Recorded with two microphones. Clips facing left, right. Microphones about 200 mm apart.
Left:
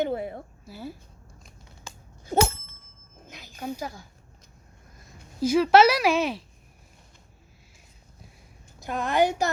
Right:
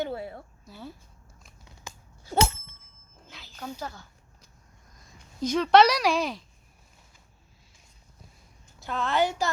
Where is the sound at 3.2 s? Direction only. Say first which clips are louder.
Left 5 dB; 15° left (ahead or behind).